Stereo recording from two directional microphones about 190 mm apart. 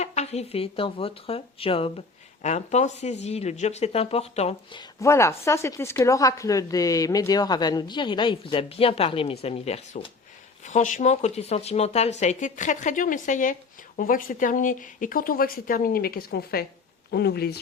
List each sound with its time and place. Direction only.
0.0 s speech: 35° left (ahead or behind); by 17.6 s 55° left (ahead or behind)